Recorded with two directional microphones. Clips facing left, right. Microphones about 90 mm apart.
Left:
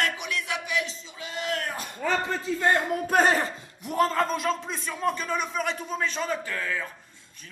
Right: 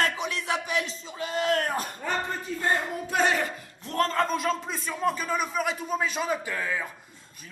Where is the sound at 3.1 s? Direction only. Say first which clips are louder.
Left 3 dB; 40° left (ahead or behind).